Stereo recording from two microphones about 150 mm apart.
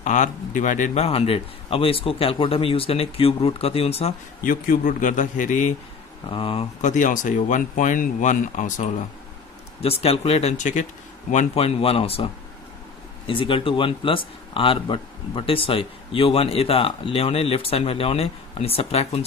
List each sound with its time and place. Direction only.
0.0 s speech: 55° left (ahead or behind)
4.5 s speech: 65° left (ahead or behind)
6.3 s speech: 35° left (ahead or behind)
6.8 s speech: 55° left (ahead or behind)
9.8 s speech: 40° left (ahead or behind)
11.5 s speech: 40° left (ahead or behind)
13.3 s speech: 35° left (ahead or behind)